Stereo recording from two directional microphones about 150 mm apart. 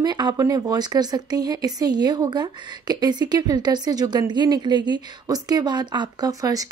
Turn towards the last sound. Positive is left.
turn(degrees=-25)  # may be behind; listen again after turning